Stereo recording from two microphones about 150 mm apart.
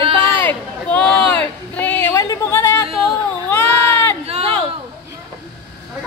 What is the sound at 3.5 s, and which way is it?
Baby cry, 15° left (ahead or behind).